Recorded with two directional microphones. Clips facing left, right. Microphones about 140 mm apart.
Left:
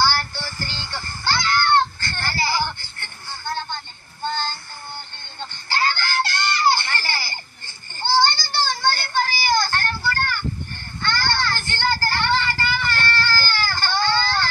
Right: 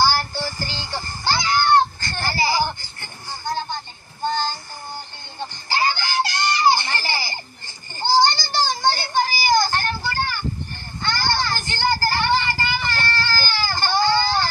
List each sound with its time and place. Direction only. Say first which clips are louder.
0.0 s music: right 2 dB; 15° right (ahead or behind)
11.0 s child singing: right 1 dB; 15° right (ahead or behind)